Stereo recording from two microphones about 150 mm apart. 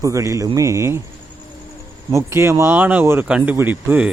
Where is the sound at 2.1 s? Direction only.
20° right (ahead or behind).